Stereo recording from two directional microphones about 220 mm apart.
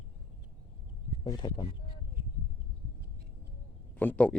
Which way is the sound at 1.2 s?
20° left (ahead or behind).